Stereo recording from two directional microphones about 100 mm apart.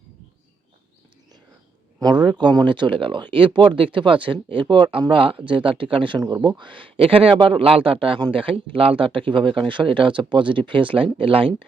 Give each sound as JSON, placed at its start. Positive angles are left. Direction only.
{"t": 2.0, "sound": "speech", "side_deg": -45}